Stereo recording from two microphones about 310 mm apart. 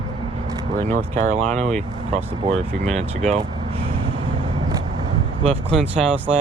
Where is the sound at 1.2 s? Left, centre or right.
Right.